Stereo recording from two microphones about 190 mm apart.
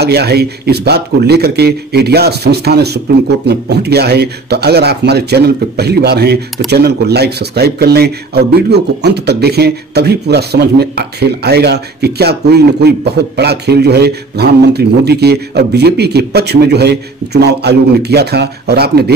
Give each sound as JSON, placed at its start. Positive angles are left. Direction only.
{"t": 0.0, "sound": "speech", "side_deg": -55}